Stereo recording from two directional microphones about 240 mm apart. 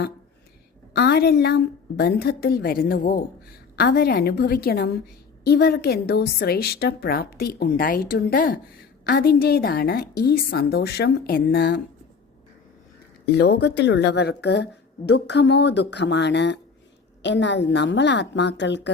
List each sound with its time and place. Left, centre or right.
0.9 s a woman's voice: left
13.4 s speech: left